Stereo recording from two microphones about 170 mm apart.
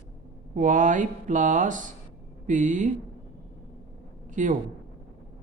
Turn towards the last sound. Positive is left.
turn(degrees=-45)  # may be behind; listen again after turning